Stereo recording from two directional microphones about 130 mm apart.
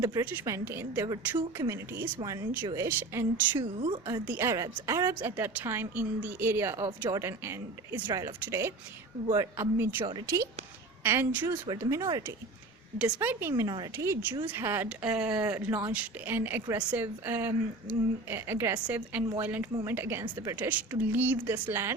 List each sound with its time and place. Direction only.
0.0 s a woman's voice: 25° right (ahead or behind)
3.6 s a woman's voice: 45° right (ahead or behind)
4.0 s a woman's voice: 20° right (ahead or behind)
8.0 s a woman's voice: 30° right (ahead or behind)
10.0 s speech: 40° right (ahead or behind)
10.2 s a woman's voice: 20° right (ahead or behind)
11.6 s a woman's voice: 30° right (ahead or behind)
13.0 s a woman's voice: 10° right (ahead or behind)
13.5 s a woman's voice: 30° right (ahead or behind)
20.2 s a woman's voice: 30° right (ahead or behind)
20.6 s a woman's voice: 10° right (ahead or behind)